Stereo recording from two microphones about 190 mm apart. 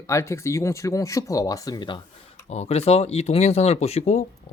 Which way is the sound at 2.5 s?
35° left (ahead or behind).